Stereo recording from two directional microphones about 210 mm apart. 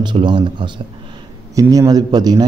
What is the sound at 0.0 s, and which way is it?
A man's voice, 20° right (ahead or behind).